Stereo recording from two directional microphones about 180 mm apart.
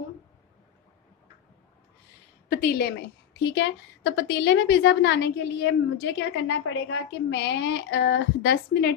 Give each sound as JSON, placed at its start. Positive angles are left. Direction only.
{"t": 2.5, "sound": "a woman's voice", "side_deg": 55}
{"t": 3.5, "sound": "a woman's voice", "side_deg": 80}